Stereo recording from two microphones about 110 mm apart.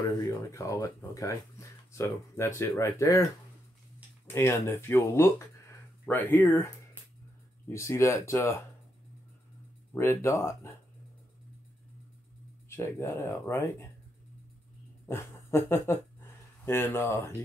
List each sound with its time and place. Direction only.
0.3 s speech: 30° left (ahead or behind)
4.3 s speech: 20° left (ahead or behind)
7.7 s speech: 25° left (ahead or behind)
9.9 s speech: 25° left (ahead or behind)
12.6 s speech: 25° left (ahead or behind)
15.0 s speech: 20° left (ahead or behind)